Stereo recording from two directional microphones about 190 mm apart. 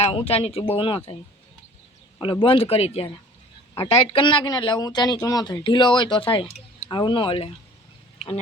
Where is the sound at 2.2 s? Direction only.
25° left (ahead or behind).